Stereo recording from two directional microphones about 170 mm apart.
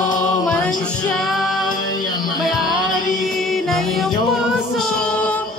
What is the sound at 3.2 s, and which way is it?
Music, centre (ahead or behind).